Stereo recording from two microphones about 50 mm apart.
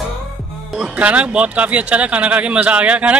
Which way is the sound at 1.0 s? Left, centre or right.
Right.